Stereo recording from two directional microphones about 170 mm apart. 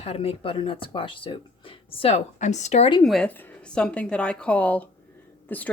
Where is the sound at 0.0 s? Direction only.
35° left (ahead or behind).